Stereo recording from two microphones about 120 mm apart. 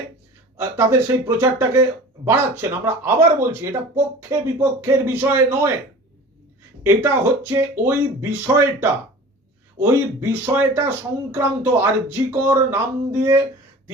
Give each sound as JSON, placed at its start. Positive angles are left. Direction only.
{"t": 0.5, "sound": "speech", "side_deg": -20}
{"t": 6.8, "sound": "speech", "side_deg": -20}